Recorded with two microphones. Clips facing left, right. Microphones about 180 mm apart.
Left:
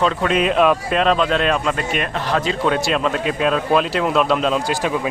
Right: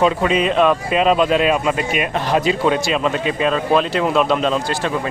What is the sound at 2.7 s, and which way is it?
Speech, centre (ahead or behind).